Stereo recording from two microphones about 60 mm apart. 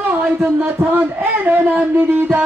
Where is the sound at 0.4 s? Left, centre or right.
Right.